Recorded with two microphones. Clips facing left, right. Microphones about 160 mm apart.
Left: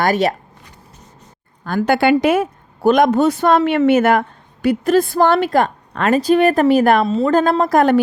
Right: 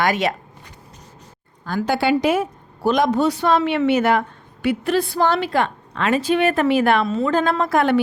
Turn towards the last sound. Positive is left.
turn(degrees=40)  # may be behind; listen again after turning